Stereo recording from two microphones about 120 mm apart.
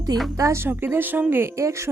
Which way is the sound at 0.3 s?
25° right (ahead or behind).